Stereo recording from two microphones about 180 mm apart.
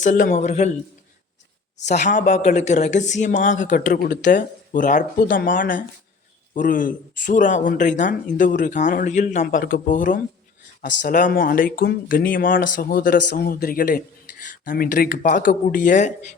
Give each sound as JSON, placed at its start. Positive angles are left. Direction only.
{"t": 0.0, "sound": "a man's voice", "side_deg": 45}
{"t": 1.9, "sound": "speech", "side_deg": 45}